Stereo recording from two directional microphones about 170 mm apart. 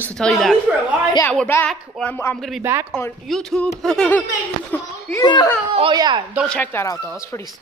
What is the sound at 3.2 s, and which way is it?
A woman's voice, 5° left (ahead or behind).